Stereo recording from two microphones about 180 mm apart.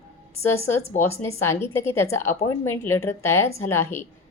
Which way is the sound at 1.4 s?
15° left (ahead or behind).